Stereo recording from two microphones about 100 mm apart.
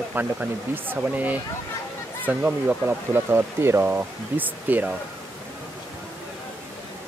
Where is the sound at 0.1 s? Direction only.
15° right (ahead or behind).